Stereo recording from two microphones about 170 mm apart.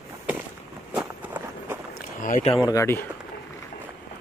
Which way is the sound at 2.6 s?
15° left (ahead or behind).